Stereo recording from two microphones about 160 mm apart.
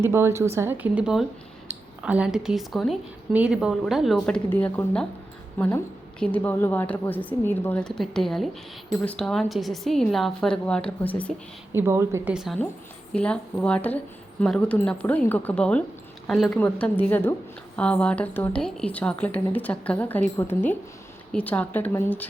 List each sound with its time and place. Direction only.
0.0 s a woman's voice: 15° right (ahead or behind)
4.4 s a woman's voice: 10° left (ahead or behind)
11.7 s speech: 15° right (ahead or behind)
12.3 s a woman's voice: 5° right (ahead or behind); by 22.3 s 15° left (ahead or behind)